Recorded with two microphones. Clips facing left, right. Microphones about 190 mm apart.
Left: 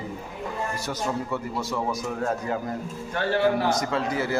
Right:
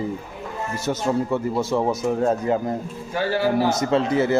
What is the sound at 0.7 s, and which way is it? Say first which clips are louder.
Speech: right 11 dB; 25° right (ahead or behind).